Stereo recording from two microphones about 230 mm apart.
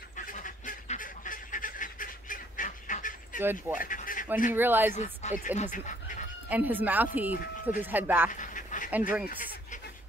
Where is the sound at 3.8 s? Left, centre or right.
Left.